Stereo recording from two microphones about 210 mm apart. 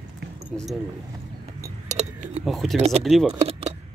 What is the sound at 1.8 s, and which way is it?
Keys jangling, 30° right (ahead or behind).